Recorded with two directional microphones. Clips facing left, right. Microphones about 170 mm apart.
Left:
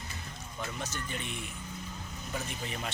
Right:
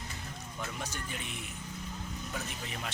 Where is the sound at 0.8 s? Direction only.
10° right (ahead or behind).